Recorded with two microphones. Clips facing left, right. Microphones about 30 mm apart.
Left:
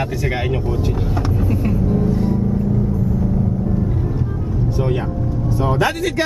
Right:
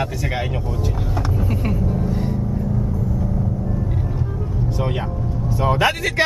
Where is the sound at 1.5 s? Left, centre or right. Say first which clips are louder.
Left 5 dB; centre.